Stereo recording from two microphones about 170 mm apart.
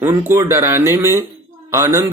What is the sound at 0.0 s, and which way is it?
Speech, 15° right (ahead or behind).